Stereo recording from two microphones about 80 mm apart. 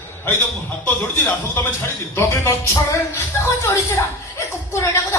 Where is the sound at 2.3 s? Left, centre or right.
Left.